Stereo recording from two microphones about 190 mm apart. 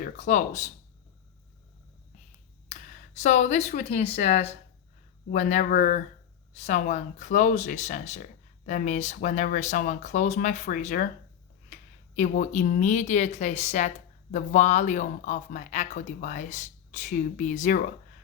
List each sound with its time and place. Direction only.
0.0 s speech: 40° left (ahead or behind)
3.2 s speech: 40° left (ahead or behind)
12.1 s speech: 40° left (ahead or behind)